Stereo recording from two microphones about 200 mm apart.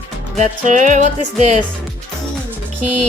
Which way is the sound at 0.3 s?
40° right (ahead or behind).